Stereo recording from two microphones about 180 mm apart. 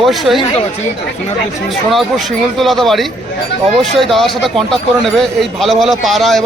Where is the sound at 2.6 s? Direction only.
Centre (ahead or behind).